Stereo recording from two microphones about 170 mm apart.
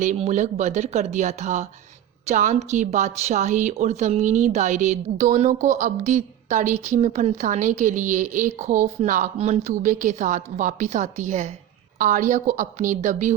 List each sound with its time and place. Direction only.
0.0 s a woman's voice: 45° right (ahead or behind)